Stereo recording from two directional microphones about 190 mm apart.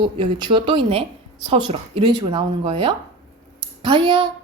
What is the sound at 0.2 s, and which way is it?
Speech, 25° right (ahead or behind).